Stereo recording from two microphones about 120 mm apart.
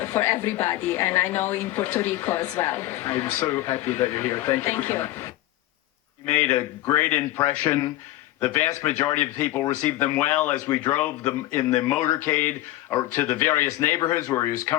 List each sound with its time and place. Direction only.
0.0 s a woman's voice: 15° left (ahead or behind)